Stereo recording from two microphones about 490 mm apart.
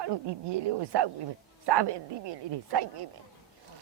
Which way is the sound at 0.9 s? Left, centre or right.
Right.